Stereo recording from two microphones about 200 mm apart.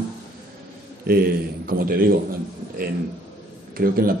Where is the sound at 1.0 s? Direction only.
50° right (ahead or behind).